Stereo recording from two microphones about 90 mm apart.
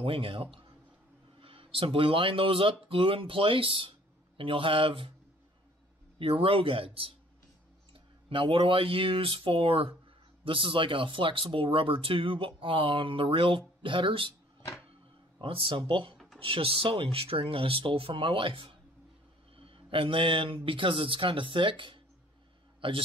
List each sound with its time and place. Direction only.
0.0 s speech: 80° right
6.1 s speech: 85° right
7.9 s speech: 80° right
10.4 s speech: 75° right (ahead or behind)
15.4 s a man's voice: 70° right (ahead or behind)